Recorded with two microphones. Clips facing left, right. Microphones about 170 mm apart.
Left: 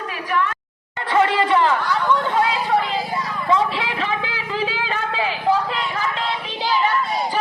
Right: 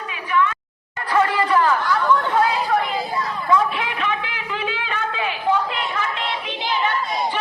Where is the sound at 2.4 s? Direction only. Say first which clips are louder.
Even; 20° left (ahead or behind).